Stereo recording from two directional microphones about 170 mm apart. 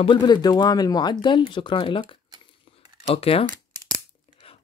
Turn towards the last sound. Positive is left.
turn(degrees=35)  # may be behind; listen again after turning